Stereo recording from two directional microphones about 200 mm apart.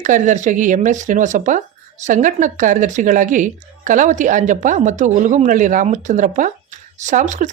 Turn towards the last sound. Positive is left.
turn(degrees=-40)  # may be behind; listen again after turning